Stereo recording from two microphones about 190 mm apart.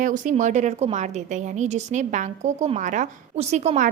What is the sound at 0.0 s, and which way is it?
A woman's voice, 40° right (ahead or behind).